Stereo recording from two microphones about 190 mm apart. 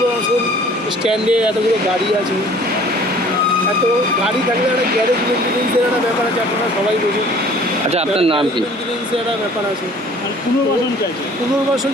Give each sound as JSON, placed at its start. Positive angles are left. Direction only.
{"t": 1.0, "sound": "speech", "side_deg": -5}
{"t": 7.9, "sound": "speech", "side_deg": -30}